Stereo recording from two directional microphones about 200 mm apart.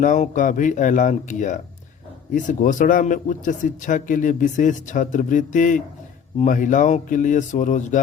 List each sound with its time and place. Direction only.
0.0 s speech: 40° left (ahead or behind)